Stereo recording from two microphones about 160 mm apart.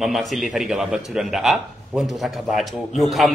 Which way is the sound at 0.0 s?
Centre (ahead or behind).